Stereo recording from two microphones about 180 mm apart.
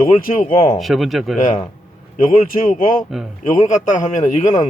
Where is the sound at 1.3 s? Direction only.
45° left (ahead or behind).